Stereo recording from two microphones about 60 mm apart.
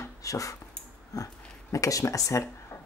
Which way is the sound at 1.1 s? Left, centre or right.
Left.